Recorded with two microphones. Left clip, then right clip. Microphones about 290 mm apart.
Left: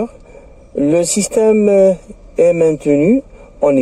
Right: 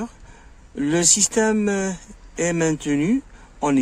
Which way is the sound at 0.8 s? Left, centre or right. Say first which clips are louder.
Left 6 dB; right.